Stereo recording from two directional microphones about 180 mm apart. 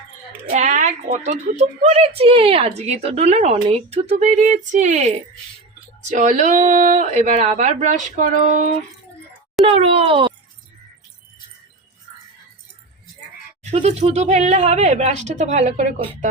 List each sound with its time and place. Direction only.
0.4 s a woman's voice: 40° right (ahead or behind)
9.6 s a woman's voice: 30° right (ahead or behind)
13.7 s a woman's voice: 35° right (ahead or behind)